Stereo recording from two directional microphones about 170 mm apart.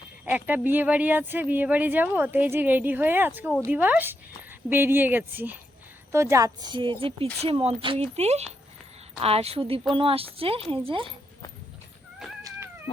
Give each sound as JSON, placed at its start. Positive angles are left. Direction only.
{"t": 0.3, "sound": "a woman's voice", "side_deg": -10}
{"t": 12.4, "sound": "cat", "side_deg": -15}